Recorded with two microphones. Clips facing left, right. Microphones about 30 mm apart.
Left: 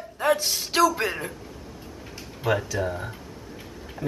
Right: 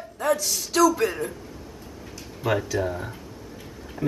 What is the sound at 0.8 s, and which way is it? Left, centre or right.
Speech, left.